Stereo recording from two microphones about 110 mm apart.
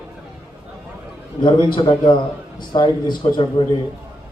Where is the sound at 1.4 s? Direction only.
45° left (ahead or behind).